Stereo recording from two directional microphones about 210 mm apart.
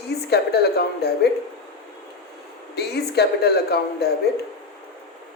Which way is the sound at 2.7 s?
50° left (ahead or behind).